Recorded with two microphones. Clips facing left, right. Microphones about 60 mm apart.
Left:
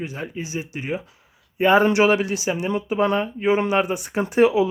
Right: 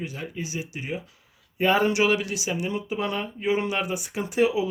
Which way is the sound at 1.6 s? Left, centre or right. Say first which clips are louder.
Left 5 dB; left.